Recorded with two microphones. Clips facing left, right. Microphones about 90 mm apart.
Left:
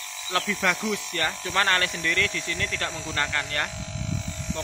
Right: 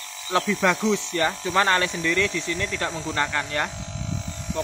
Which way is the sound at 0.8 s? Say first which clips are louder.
Right 5 dB; 20° right (ahead or behind).